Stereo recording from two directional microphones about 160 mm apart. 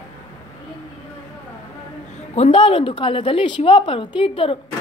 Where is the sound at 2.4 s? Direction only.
35° left (ahead or behind).